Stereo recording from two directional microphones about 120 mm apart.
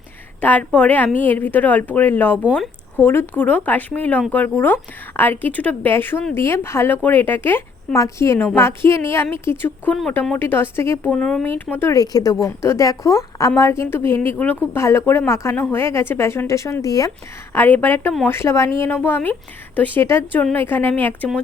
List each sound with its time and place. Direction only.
0.4 s a woman's voice: 10° left (ahead or behind)
9.9 s a woman's voice: 5° left (ahead or behind)
10.3 s a woman's voice: 20° left (ahead or behind)
11.9 s speech: 30° left (ahead or behind)
17.5 s a woman's voice: 15° left (ahead or behind)